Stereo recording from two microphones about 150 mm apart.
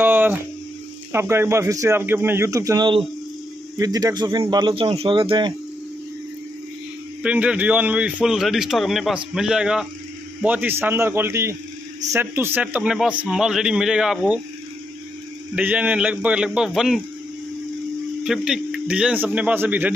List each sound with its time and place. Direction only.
0.0 s mains hum: 15° right (ahead or behind)
1.1 s a man's voice: 15° right (ahead or behind); by 5.5 s 35° right (ahead or behind)
7.2 s a man's voice: 10° right (ahead or behind)
15.5 s a man's voice: 10° right (ahead or behind)
18.2 s a man's voice: 5° right (ahead or behind)